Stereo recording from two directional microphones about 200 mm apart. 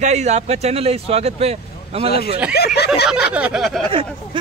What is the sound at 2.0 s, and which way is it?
Speech, 50° left (ahead or behind).